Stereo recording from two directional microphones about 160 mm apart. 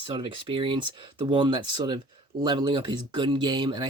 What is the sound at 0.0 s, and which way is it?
Speech, 30° right (ahead or behind).